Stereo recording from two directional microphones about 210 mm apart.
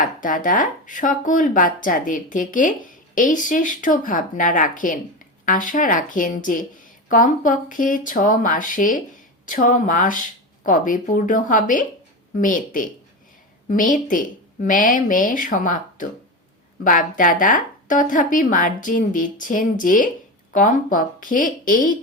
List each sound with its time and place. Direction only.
0.0 s speech: 40° left (ahead or behind)